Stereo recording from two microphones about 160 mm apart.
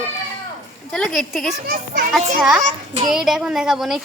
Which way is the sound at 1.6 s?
65° right (ahead or behind).